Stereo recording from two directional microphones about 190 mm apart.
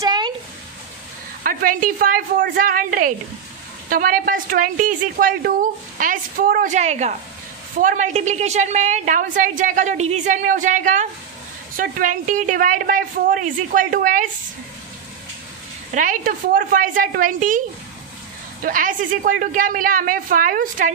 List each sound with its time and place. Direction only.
0.0 s a sound: 20° right (ahead or behind)
1.4 s a woman's voice: 50° right (ahead or behind)
15.9 s a woman's voice: 45° right (ahead or behind)